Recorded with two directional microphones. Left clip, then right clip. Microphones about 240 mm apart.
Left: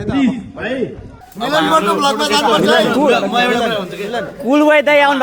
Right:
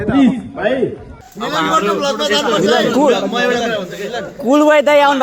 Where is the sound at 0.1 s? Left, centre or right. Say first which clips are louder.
Right 3 dB; centre.